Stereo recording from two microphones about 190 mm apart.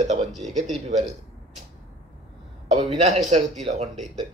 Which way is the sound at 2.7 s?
35° right (ahead or behind).